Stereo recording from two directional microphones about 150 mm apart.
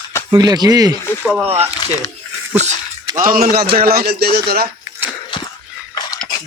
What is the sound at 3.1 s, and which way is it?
A man's voice, 70° right (ahead or behind).